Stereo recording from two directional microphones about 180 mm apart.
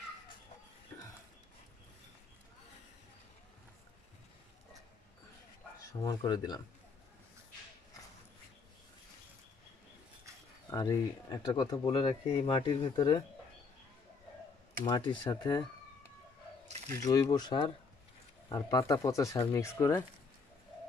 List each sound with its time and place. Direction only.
5.8 s speech: 20° left (ahead or behind)
10.7 s speech: 20° left (ahead or behind)
14.9 s speech: 25° left (ahead or behind)
17.0 s speech: 20° left (ahead or behind)